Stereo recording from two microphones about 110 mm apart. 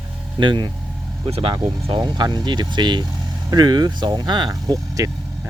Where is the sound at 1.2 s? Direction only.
65° right (ahead or behind).